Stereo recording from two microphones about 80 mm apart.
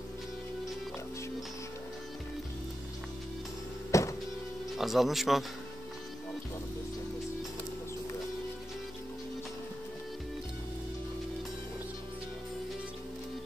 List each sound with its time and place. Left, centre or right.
3.9 s music: left
4.7 s speech: centre